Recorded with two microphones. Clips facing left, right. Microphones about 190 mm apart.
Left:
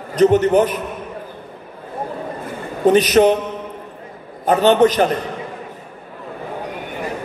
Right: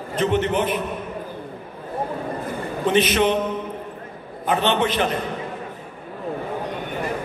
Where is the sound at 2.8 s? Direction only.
40° left (ahead or behind).